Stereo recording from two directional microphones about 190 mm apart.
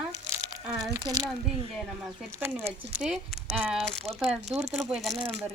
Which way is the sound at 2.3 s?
15° right (ahead or behind).